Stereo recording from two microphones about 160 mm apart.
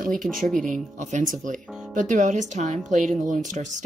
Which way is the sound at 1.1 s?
55° right (ahead or behind).